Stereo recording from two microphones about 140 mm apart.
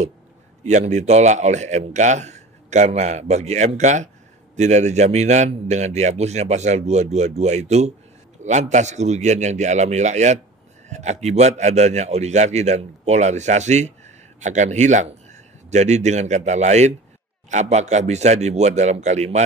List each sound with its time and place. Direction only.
0.7 s a man's voice: 55° right (ahead or behind)